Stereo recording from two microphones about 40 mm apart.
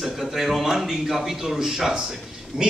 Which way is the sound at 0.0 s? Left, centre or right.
Centre.